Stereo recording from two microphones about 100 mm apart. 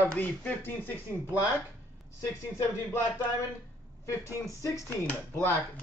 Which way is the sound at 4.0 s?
35° left (ahead or behind).